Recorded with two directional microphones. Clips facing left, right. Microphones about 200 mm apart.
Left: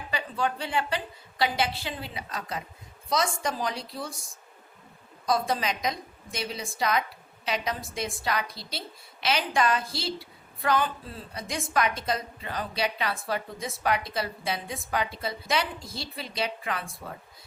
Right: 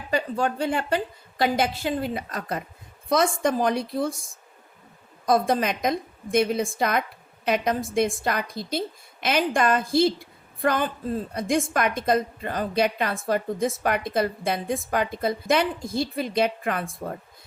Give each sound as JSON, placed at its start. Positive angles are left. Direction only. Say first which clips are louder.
{"t": 0.1, "sound": "a woman's voice", "louder": "right 5 dB", "side_deg": -45}
{"t": 5.2, "sound": "a woman's voice", "louder": "right 5 dB", "side_deg": -55}